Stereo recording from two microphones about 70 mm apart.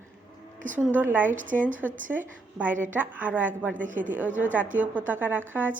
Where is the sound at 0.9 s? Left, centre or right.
Right.